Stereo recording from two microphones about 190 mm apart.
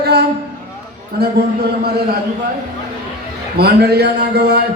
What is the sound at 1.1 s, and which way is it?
Chant, 55° right (ahead or behind).